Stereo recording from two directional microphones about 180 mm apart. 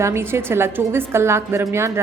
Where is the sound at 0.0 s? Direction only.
15° right (ahead or behind).